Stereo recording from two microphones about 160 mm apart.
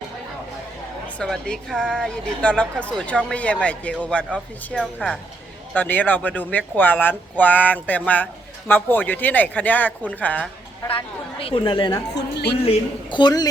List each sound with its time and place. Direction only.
1.0 s a woman's voice: 5° left (ahead or behind)
10.9 s speech: 35° left (ahead or behind)
12.1 s speech: 90° left
12.6 s a woman's voice: 30° left (ahead or behind)